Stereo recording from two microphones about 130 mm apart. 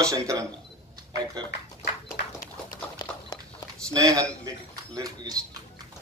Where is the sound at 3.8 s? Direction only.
25° right (ahead or behind).